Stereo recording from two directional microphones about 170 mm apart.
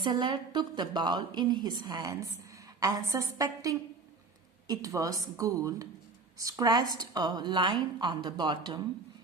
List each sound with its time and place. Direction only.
0.0 s a woman's voice: 25° right (ahead or behind)